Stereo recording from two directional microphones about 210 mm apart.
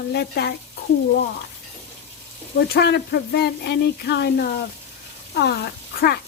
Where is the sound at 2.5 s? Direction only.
50° left (ahead or behind).